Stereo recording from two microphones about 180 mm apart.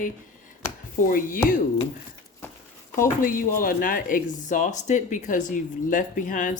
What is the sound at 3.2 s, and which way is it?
Speech, 50° left (ahead or behind).